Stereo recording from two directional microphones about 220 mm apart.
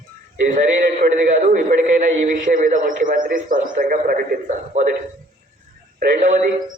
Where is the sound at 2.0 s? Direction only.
35° right (ahead or behind).